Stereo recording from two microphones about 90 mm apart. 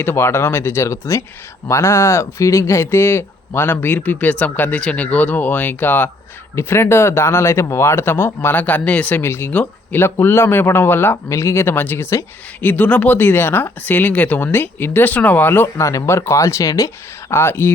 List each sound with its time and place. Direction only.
0.0 s speech: 25° left (ahead or behind)
15.8 s speech: 35° left (ahead or behind)
17.4 s speech: 25° left (ahead or behind)